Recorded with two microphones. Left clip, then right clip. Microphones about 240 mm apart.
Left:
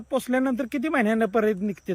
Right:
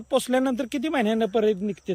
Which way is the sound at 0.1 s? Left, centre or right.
Centre.